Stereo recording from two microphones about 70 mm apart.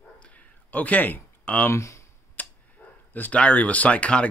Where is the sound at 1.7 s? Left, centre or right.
Left.